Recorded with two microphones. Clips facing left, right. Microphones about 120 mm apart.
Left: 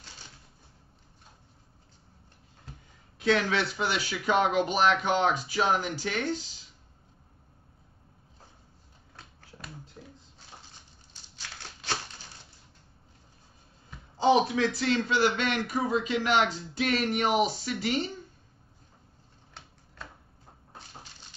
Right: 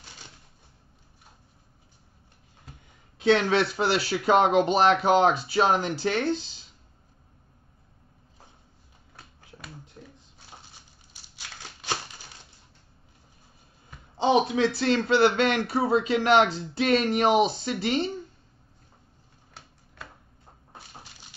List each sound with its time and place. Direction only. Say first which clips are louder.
3.2 s speech: right 5 dB; 30° right (ahead or behind)
10.7 s crumpling: right 1 dB; 10° right (ahead or behind)
14.1 s a sound: right 1 dB; 25° right (ahead or behind)
14.5 s speech: right 3 dB; 30° right (ahead or behind)
15.1 s speech: right 8 dB; 65° right (ahead or behind)
15.6 s speech: right 5 dB; 30° right (ahead or behind)
20.7 s a sound: right 1 dB; 10° right (ahead or behind)